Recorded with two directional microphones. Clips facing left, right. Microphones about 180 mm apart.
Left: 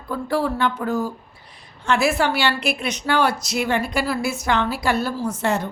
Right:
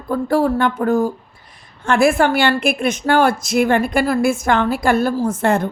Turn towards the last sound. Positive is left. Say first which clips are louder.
# right 6 dB
turn(degrees=-50)  # may be behind; listen again after turning